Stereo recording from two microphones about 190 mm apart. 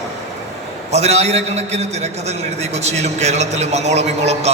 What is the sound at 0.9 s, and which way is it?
A man's voice, 35° right (ahead or behind).